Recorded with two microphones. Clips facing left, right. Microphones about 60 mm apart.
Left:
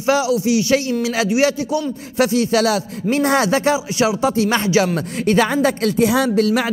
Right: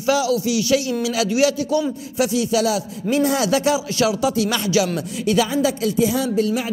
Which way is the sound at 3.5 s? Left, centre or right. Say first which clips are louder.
Left 1 dB; left.